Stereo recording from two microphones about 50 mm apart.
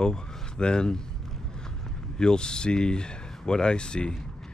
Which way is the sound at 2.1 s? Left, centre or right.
Centre.